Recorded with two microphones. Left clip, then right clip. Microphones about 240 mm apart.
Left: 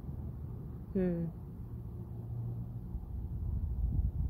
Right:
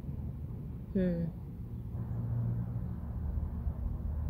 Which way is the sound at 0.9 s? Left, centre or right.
Centre.